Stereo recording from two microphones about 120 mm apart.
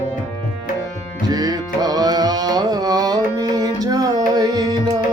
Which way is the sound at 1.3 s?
35° right (ahead or behind).